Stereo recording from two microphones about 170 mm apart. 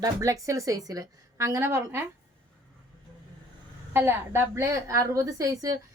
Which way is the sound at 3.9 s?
15° right (ahead or behind).